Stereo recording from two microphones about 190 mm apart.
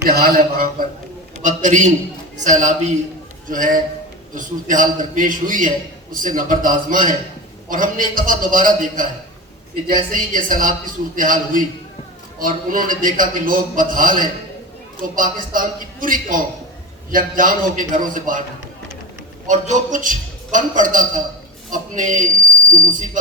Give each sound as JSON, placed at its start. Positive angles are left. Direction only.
{"t": 0.0, "sound": "a man's voice", "side_deg": -55}
{"t": 1.4, "sound": "a sound", "side_deg": -40}
{"t": 2.4, "sound": "a man's voice", "side_deg": -40}
{"t": 19.5, "sound": "a man's voice", "side_deg": -40}